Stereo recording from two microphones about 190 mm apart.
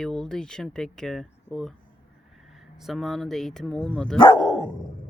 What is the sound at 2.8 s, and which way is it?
Speech, centre (ahead or behind).